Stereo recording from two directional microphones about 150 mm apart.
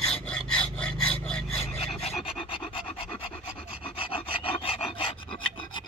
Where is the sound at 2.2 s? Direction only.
35° left (ahead or behind).